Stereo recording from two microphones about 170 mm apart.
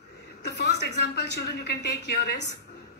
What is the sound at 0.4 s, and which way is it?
A woman's voice, 80° left.